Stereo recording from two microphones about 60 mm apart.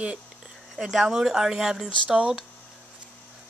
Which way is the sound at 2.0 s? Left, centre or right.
Centre.